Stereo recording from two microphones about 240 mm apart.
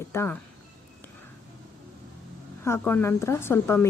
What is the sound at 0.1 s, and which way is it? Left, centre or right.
Speech, centre.